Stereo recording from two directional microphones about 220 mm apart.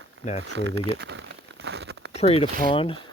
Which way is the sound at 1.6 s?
50° right (ahead or behind).